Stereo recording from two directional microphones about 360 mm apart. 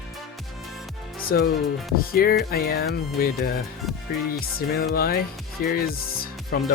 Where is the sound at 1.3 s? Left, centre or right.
Left.